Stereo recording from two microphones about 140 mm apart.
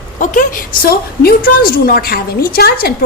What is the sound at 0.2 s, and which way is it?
A woman's voice, 80° left.